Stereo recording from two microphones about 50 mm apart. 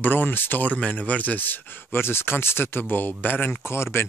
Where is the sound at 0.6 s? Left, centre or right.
Left.